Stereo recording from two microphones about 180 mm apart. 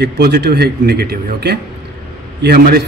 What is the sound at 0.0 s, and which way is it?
A man's voice, 65° right (ahead or behind).